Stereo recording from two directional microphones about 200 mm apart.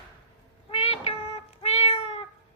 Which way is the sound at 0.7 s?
30° left (ahead or behind).